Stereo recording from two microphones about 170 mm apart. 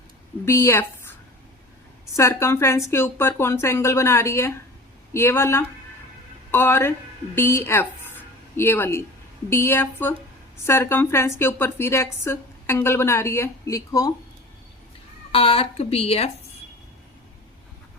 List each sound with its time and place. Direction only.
0.4 s a woman's voice: 15° left (ahead or behind)
2.1 s a woman's voice: 15° left (ahead or behind)
15.3 s a woman's voice: 35° left (ahead or behind)